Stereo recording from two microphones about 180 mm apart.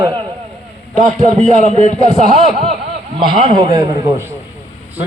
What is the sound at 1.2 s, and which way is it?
A man's voice, 35° right (ahead or behind).